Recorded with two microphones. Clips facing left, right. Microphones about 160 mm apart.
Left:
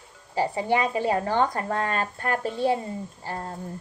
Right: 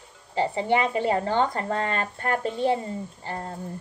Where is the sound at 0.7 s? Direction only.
25° right (ahead or behind).